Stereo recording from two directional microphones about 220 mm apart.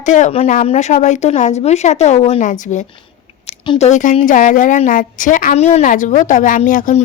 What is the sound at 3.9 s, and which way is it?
Speech, 35° left (ahead or behind).